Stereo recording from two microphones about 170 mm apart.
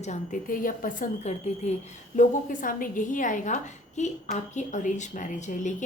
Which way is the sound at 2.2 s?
50° left (ahead or behind).